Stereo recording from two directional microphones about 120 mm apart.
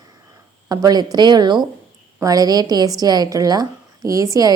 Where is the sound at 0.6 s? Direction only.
35° right (ahead or behind).